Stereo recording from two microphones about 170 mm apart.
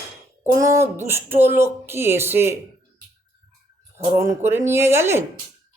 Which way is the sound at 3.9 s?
15° right (ahead or behind).